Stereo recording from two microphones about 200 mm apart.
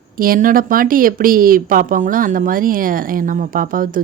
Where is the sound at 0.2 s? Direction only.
45° right (ahead or behind).